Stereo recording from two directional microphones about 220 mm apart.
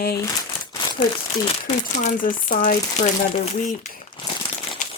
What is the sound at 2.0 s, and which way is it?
Speech, 40° left (ahead or behind).